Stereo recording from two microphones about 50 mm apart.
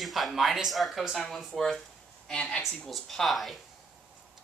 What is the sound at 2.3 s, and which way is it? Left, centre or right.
Speech, centre.